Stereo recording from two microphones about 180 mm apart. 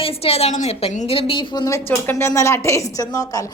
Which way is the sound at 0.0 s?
30° left (ahead or behind).